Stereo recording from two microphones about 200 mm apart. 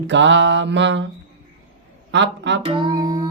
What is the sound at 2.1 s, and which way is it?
Speech, 65° right (ahead or behind).